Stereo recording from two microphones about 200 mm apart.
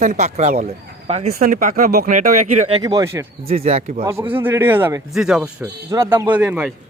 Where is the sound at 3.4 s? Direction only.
30° right (ahead or behind).